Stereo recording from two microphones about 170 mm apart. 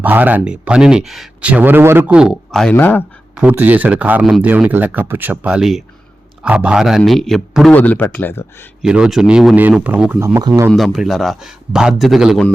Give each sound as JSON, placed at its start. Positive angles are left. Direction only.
{"t": 0.0, "sound": "speech", "side_deg": -10}
{"t": 3.3, "sound": "a man's voice", "side_deg": -10}
{"t": 8.8, "sound": "a man's voice", "side_deg": -5}
{"t": 10.7, "sound": "a man's voice", "side_deg": 0}